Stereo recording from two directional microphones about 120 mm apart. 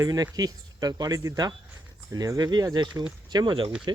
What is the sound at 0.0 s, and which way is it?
Speech, 30° right (ahead or behind).